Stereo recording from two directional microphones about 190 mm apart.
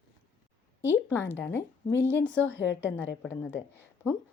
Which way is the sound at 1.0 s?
10° left (ahead or behind).